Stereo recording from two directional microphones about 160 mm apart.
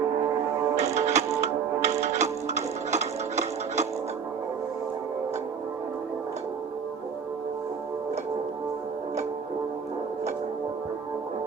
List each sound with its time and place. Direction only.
0.8 s music: 45° right (ahead or behind)